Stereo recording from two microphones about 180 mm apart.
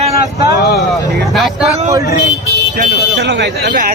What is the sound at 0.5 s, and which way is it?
Speech, 65° left (ahead or behind).